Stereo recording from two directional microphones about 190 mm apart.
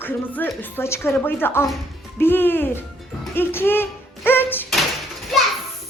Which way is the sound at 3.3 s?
10° left (ahead or behind).